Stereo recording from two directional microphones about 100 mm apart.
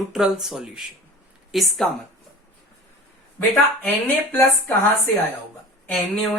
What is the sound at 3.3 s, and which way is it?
Speech, 15° left (ahead or behind).